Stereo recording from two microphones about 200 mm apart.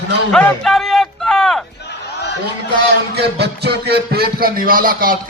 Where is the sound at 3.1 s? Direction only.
55° right (ahead or behind).